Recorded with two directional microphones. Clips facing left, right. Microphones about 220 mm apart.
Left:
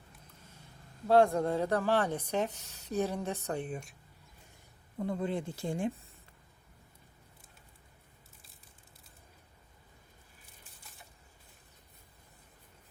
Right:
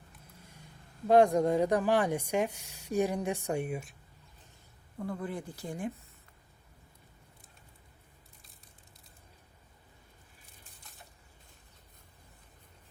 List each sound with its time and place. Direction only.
1.0 s speech: 15° right (ahead or behind)
5.0 s speech: 25° left (ahead or behind)